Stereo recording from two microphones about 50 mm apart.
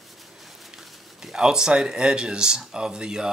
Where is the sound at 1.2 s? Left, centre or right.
Centre.